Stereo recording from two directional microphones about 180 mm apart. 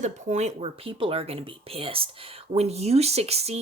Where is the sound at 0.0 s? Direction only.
40° right (ahead or behind).